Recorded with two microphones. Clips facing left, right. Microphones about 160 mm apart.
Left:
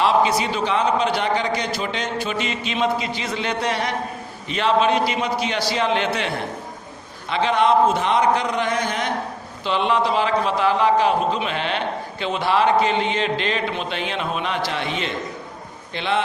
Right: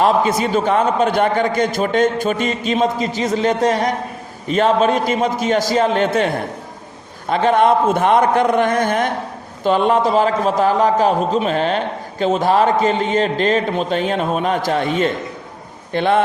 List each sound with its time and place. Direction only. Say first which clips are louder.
0.0 s a man's voice: right 3 dB; 45° right (ahead or behind)